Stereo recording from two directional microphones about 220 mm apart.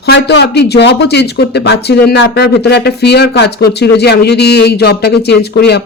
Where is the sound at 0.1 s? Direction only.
50° left (ahead or behind).